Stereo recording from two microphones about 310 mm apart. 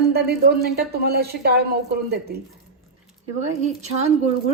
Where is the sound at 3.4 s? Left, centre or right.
Right.